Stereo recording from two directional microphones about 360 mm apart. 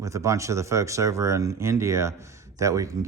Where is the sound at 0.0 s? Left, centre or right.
Centre.